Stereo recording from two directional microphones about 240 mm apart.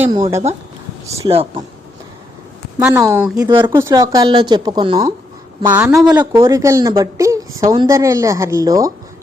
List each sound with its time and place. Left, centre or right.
0.0 s speech: centre
2.8 s speech: centre